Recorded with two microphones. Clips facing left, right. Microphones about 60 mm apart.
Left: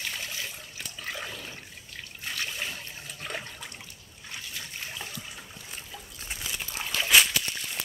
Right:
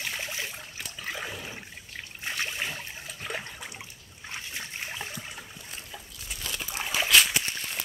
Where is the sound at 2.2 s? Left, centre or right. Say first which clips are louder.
Right 2 dB; right.